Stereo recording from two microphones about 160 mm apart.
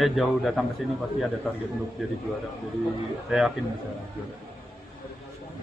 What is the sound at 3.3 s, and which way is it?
Speech, 5° right (ahead or behind).